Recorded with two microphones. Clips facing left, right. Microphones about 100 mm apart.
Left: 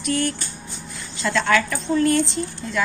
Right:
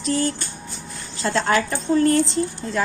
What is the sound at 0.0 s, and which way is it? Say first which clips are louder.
A woman's voice: right 1 dB; 30° right (ahead or behind).